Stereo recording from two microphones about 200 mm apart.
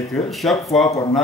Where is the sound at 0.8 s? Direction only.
20° left (ahead or behind).